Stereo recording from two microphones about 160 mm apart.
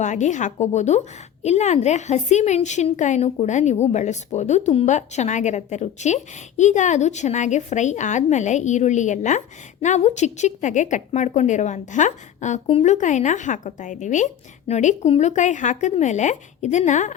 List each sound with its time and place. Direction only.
0.0 s a woman's voice: 50° left (ahead or behind)